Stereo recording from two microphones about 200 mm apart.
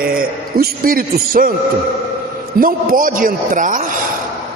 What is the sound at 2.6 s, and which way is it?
A man's voice, 45° right (ahead or behind).